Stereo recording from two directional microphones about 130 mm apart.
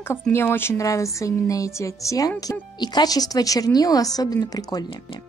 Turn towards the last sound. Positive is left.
turn(degrees=30)  # may be behind; listen again after turning